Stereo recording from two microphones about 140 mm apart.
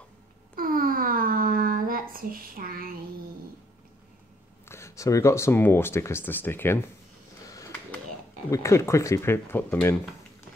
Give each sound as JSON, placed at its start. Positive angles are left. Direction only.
{"t": 0.6, "sound": "a sound", "side_deg": -90}
{"t": 4.6, "sound": "speech", "side_deg": 20}
{"t": 8.5, "sound": "speech", "side_deg": 20}